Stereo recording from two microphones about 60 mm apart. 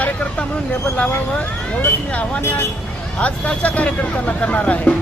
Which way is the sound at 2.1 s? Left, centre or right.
Left.